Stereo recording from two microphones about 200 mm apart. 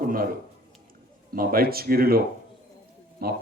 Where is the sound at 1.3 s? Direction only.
50° right (ahead or behind).